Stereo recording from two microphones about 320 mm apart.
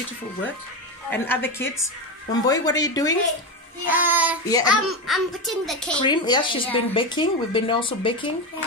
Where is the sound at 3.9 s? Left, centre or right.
Centre.